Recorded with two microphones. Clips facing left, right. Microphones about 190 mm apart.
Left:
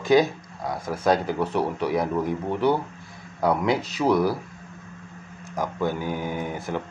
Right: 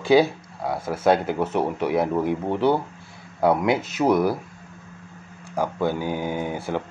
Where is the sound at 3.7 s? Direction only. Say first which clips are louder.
Right 2 dB; 20° right (ahead or behind).